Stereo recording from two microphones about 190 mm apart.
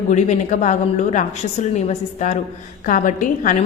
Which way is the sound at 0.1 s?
40° left (ahead or behind).